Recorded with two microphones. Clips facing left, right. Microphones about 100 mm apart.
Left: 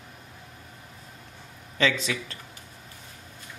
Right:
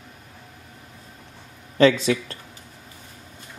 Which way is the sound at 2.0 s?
40° right (ahead or behind).